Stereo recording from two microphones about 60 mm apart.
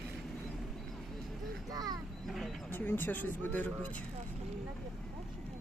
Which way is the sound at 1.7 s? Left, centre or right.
Right.